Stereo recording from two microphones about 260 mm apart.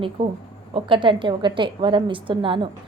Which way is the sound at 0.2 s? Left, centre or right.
Centre.